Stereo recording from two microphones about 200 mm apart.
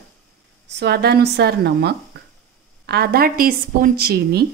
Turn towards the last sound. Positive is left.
turn(degrees=-50)  # may be behind; listen again after turning